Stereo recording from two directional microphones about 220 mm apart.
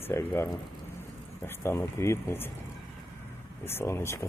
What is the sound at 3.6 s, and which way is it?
Speech, 10° left (ahead or behind).